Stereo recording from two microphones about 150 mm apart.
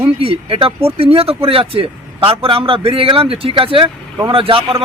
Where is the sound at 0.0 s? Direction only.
40° right (ahead or behind).